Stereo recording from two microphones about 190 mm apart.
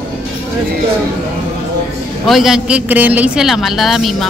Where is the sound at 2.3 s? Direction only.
Centre (ahead or behind).